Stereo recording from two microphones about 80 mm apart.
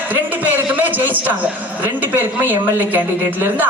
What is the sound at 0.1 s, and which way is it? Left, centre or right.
A man's voice, right.